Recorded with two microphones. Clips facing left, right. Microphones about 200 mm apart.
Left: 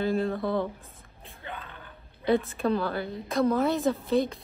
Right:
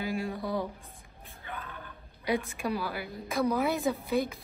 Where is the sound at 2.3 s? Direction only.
15° right (ahead or behind).